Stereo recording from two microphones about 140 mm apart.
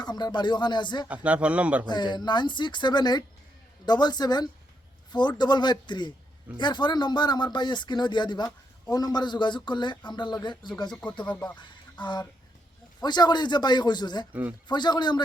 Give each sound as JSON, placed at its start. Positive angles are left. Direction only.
{"t": 0.0, "sound": "speech", "side_deg": 30}
{"t": 1.0, "sound": "speech", "side_deg": -10}
{"t": 1.9, "sound": "a woman's voice", "side_deg": 30}
{"t": 10.9, "sound": "speech", "side_deg": 10}
{"t": 11.6, "sound": "a sound", "side_deg": 35}
{"t": 13.0, "sound": "speech", "side_deg": 30}